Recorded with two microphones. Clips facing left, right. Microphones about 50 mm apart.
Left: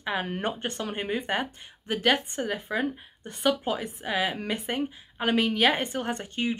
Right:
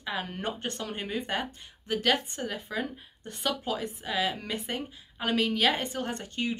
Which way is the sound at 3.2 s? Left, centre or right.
Centre.